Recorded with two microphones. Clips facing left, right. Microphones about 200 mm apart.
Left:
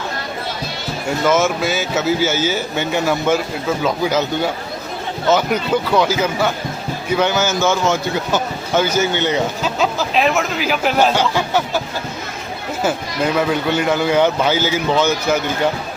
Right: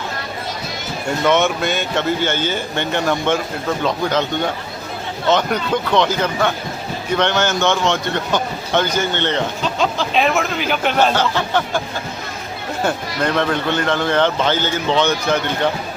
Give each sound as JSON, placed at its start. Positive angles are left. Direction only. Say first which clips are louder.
{"t": 1.2, "sound": "a man's voice", "louder": "even", "side_deg": 0}
{"t": 12.8, "sound": "a man's voice", "louder": "left 1 dB", "side_deg": 5}